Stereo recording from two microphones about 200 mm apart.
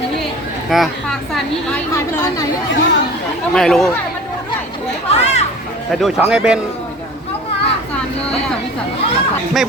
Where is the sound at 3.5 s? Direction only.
5° left (ahead or behind).